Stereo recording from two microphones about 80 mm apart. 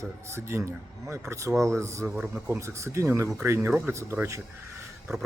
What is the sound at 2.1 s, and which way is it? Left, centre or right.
Speech, centre.